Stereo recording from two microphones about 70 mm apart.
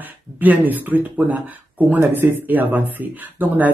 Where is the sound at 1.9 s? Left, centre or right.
Right.